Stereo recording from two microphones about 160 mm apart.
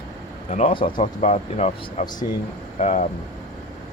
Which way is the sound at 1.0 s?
45° left (ahead or behind).